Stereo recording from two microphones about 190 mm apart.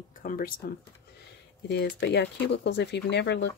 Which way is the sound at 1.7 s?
65° left (ahead or behind).